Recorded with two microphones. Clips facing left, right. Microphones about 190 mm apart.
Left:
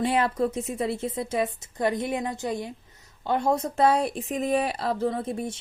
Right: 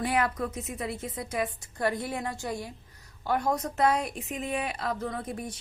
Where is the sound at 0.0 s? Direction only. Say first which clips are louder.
Left 4 dB; 25° left (ahead or behind).